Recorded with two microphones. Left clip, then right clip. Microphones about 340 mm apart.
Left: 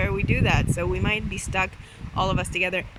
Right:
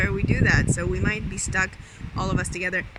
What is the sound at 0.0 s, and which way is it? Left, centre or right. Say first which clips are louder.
Speech: right 1 dB; centre.